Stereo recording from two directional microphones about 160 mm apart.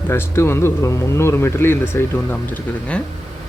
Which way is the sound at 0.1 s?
15° left (ahead or behind).